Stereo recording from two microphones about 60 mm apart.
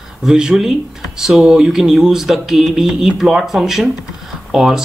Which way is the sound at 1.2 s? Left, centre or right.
Centre.